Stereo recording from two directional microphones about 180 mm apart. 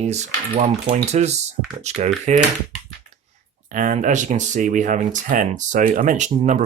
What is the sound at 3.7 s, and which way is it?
Speech, 45° right (ahead or behind).